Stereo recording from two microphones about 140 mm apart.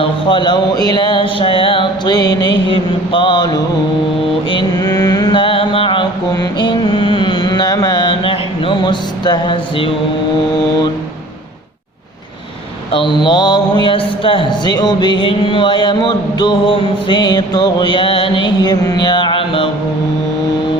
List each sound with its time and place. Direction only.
0.0 s music: 35° left (ahead or behind)
4.5 s mantra: 25° left (ahead or behind)
12.9 s a sound: 35° left (ahead or behind)